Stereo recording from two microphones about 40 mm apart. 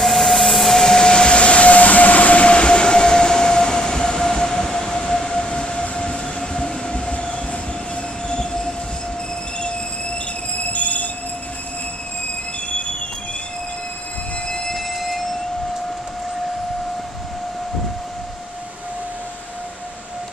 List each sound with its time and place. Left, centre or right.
0.0 s train: centre; by 7.3 s left
8.3 s train: centre
10.7 s train: left
14.7 s a sound: centre